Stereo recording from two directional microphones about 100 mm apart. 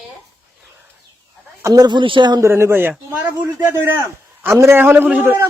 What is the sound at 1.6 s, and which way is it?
Speech, 40° right (ahead or behind).